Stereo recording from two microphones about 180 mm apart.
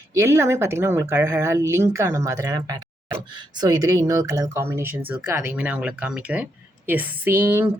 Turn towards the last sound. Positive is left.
turn(degrees=-10)  # may be behind; listen again after turning